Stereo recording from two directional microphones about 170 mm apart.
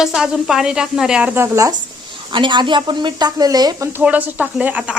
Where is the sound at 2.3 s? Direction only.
30° right (ahead or behind).